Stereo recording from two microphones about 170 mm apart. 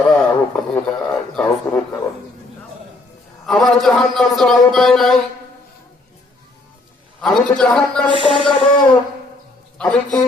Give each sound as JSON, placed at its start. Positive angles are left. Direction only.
{"t": 0.0, "sound": "a man's voice", "side_deg": 5}
{"t": 3.4, "sound": "a man's voice", "side_deg": 0}
{"t": 7.2, "sound": "a man's voice", "side_deg": 0}
{"t": 8.0, "sound": "speech", "side_deg": 30}
{"t": 9.7, "sound": "a man's voice", "side_deg": 5}